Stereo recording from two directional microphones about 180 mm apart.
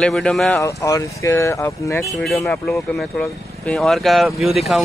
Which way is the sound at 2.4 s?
5° left (ahead or behind).